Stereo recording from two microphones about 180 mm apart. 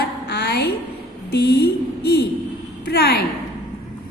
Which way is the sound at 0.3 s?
65° left (ahead or behind).